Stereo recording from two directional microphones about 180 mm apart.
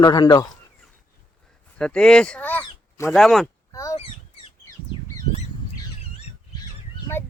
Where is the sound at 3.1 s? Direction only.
Centre (ahead or behind).